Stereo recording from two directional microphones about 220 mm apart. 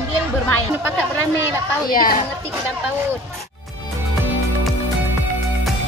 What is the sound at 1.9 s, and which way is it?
Speech, 40° left (ahead or behind).